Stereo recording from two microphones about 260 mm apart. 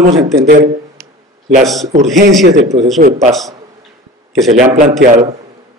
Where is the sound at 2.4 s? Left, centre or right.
Right.